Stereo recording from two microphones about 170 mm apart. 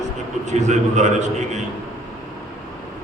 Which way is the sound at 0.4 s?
45° right (ahead or behind).